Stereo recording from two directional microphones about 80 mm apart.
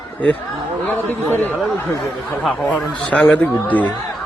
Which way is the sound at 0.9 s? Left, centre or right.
Left.